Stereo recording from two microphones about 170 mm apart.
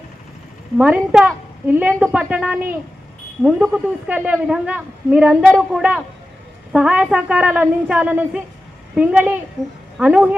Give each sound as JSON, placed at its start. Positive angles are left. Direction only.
{"t": 0.8, "sound": "a woman's voice", "side_deg": -10}